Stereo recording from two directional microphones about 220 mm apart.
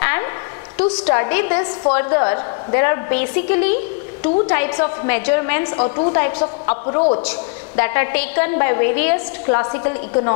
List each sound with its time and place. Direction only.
0.0 s a sound: 15° left (ahead or behind)
0.7 s a woman's voice: 10° left (ahead or behind); by 6.0 s 25° left (ahead or behind)
6.1 s a woman's voice: 15° left (ahead or behind)
7.0 s a man's voice: 30° left (ahead or behind)
7.2 s a woman's voice: 15° left (ahead or behind)